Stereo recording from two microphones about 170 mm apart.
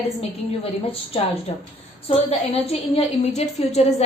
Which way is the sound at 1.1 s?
35° left (ahead or behind).